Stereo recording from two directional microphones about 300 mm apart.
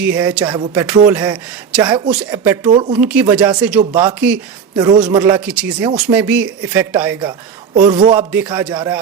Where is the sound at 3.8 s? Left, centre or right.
Right.